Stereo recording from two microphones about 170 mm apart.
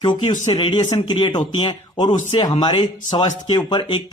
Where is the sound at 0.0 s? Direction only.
25° left (ahead or behind).